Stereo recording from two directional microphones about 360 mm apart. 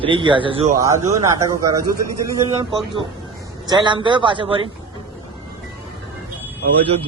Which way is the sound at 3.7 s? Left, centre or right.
Centre.